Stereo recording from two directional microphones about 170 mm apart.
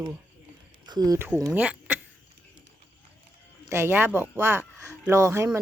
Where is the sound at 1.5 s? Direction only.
10° right (ahead or behind).